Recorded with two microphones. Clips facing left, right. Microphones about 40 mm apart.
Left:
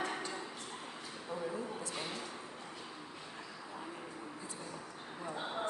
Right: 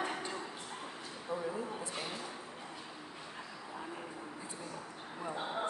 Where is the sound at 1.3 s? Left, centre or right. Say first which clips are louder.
Right 2 dB; centre.